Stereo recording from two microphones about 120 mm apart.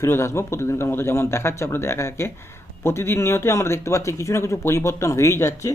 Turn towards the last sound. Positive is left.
turn(degrees=25)  # may be behind; listen again after turning